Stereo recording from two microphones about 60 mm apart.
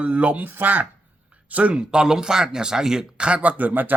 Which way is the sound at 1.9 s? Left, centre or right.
Centre.